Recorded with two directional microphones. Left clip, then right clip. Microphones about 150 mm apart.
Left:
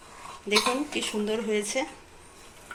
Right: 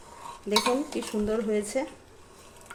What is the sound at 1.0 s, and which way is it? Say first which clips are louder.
Speech: even; 40° right (ahead or behind).